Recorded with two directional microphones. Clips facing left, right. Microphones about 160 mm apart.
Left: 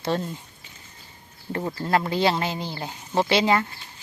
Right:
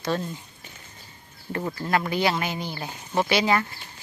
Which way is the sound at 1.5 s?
25° left (ahead or behind).